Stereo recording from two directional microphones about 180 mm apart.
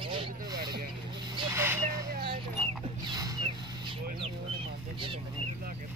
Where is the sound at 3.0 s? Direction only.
20° right (ahead or behind).